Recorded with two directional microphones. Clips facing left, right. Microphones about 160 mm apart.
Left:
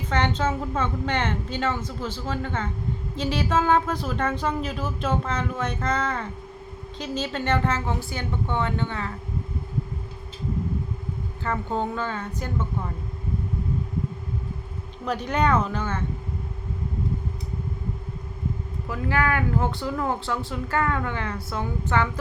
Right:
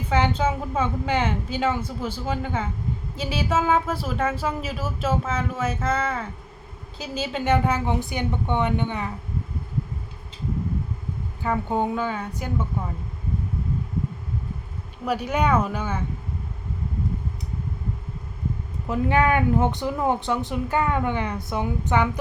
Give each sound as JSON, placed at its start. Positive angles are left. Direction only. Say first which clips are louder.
{"t": 0.1, "sound": "a woman's voice", "louder": "right 2 dB", "side_deg": -10}
{"t": 11.4, "sound": "a woman's voice", "louder": "right 3 dB", "side_deg": -15}
{"t": 15.0, "sound": "a woman's voice", "louder": "right 1 dB", "side_deg": -10}
{"t": 18.9, "sound": "speech", "louder": "right 4 dB", "side_deg": -20}